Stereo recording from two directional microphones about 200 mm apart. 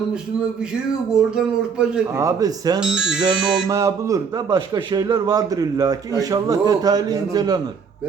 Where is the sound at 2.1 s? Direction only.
15° right (ahead or behind).